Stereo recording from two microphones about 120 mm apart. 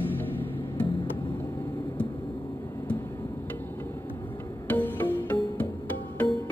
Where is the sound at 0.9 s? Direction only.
40° left (ahead or behind).